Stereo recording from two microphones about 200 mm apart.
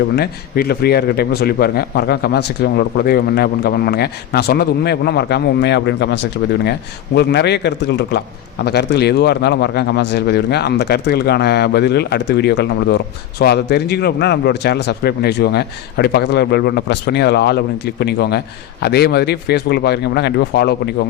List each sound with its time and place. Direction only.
0.2 s a man's voice: 50° left (ahead or behind)